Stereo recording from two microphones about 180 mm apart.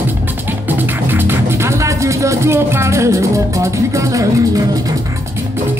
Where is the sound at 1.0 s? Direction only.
10° right (ahead or behind).